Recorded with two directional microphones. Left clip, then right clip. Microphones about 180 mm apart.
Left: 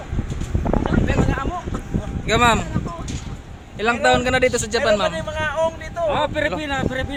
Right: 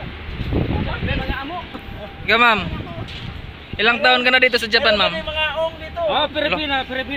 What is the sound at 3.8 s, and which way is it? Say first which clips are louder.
Speech: right 3 dB; 10° left (ahead or behind).